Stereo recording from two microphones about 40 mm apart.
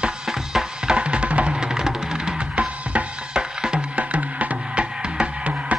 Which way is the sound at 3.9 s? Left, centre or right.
Right.